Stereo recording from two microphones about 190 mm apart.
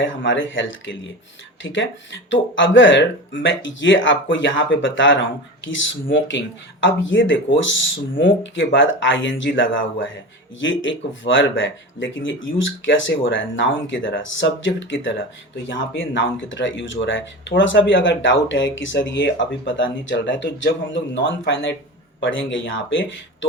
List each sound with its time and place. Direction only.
0.3 s speech: 80° left
22.2 s speech: 80° left